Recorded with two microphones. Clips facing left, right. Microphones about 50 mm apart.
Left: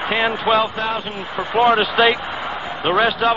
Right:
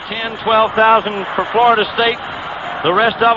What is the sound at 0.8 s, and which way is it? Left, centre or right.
Speech, right.